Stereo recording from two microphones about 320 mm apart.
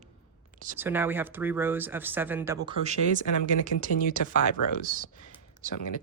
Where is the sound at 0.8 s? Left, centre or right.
Centre.